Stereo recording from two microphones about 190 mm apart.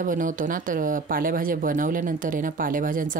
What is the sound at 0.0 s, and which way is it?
Speech, 45° right (ahead or behind).